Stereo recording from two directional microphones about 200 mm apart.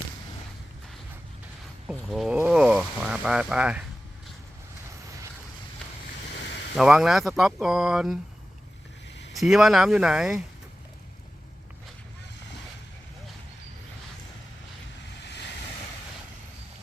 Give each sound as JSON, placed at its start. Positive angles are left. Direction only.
{"t": 1.9, "sound": "speech", "side_deg": 0}
{"t": 6.7, "sound": "speech", "side_deg": -5}
{"t": 9.3, "sound": "speech", "side_deg": 0}
{"t": 15.2, "sound": "vehicle", "side_deg": 60}